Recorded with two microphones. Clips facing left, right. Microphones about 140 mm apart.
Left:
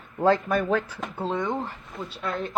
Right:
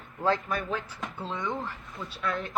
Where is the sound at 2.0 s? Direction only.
30° left (ahead or behind).